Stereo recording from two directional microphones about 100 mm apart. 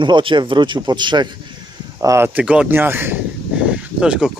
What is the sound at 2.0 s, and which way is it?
Speech, 30° right (ahead or behind).